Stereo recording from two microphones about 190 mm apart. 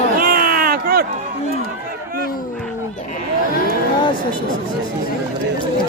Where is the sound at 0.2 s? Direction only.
50° right (ahead or behind).